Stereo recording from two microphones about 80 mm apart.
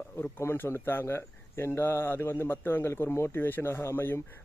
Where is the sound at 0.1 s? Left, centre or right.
Left.